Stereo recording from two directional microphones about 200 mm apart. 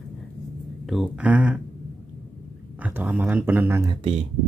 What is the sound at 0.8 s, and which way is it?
Speech, centre (ahead or behind).